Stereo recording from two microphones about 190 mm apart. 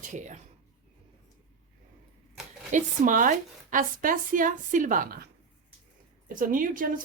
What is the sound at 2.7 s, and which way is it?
Speech, 40° right (ahead or behind).